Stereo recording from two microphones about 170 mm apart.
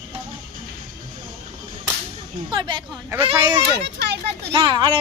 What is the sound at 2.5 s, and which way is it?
Speech, 30° right (ahead or behind).